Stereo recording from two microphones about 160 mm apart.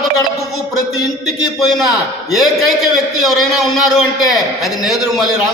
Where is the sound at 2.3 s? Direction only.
Centre (ahead or behind).